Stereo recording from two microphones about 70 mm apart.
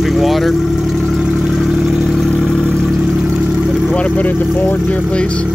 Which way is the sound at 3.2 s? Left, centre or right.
Centre.